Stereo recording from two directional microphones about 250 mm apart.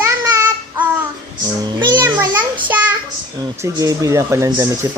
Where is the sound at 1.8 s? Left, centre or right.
Centre.